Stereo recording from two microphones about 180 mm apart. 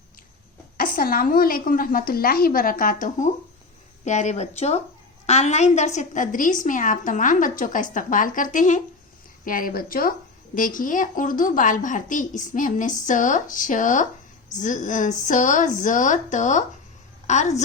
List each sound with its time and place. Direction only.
0.8 s a woman's voice: 50° left (ahead or behind)